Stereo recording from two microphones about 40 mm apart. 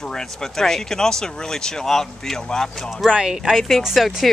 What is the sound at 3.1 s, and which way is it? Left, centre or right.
Speech, centre.